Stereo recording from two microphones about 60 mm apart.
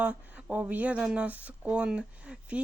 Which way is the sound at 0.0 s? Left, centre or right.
Centre.